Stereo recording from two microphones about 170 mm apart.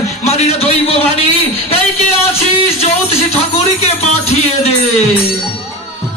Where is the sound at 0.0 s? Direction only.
40° left (ahead or behind).